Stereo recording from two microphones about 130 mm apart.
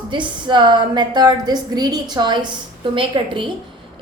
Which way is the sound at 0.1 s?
35° right (ahead or behind).